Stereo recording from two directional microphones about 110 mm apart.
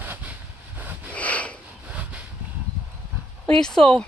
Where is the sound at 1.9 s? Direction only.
10° right (ahead or behind).